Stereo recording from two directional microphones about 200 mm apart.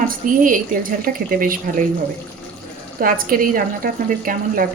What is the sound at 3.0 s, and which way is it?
A woman's voice, 45° right (ahead or behind).